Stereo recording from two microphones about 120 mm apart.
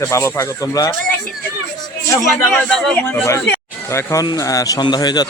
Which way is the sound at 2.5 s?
5° left (ahead or behind).